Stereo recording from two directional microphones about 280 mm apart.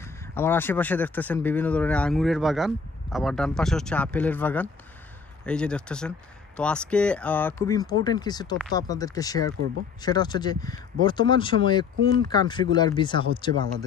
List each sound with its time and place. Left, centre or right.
0.3 s speech: centre